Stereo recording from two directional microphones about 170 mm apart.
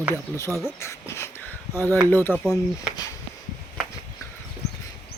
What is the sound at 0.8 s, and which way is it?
Speech, 15° left (ahead or behind).